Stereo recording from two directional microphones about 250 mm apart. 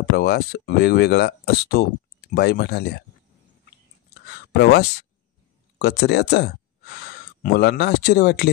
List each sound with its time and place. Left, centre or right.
0.1 s speech: left
4.3 s a sound: left
5.8 s speech: left